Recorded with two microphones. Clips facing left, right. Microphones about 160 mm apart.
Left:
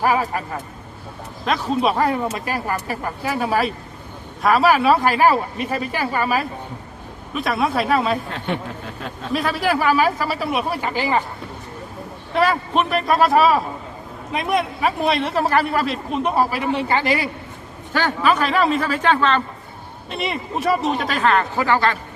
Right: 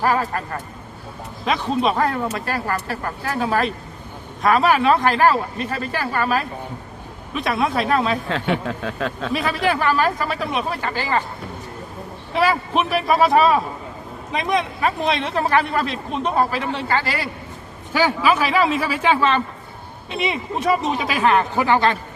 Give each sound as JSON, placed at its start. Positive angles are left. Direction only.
{"t": 0.0, "sound": "speech", "side_deg": 10}
{"t": 8.6, "sound": "speech", "side_deg": -90}
{"t": 9.3, "sound": "speech", "side_deg": 0}
{"t": 12.3, "sound": "speech", "side_deg": 0}
{"t": 17.9, "sound": "a man's voice", "side_deg": -5}
{"t": 21.2, "sound": "speech", "side_deg": -15}